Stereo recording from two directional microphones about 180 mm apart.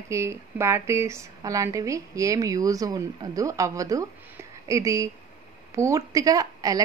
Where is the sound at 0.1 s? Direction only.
15° right (ahead or behind).